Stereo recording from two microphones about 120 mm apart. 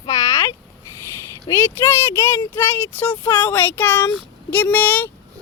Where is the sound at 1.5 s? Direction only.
25° left (ahead or behind).